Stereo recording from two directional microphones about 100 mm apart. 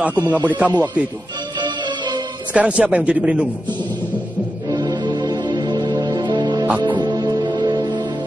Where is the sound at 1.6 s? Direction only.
50° right (ahead or behind).